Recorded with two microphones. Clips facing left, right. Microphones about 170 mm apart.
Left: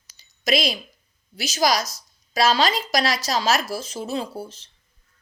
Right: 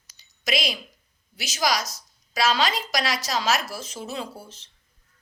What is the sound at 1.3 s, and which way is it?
Speech, 35° left (ahead or behind).